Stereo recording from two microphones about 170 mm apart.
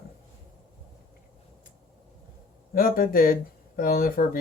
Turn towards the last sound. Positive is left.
turn(degrees=55)  # may be behind; listen again after turning